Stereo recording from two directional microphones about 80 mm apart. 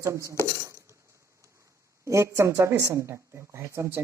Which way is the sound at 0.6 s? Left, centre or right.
Right.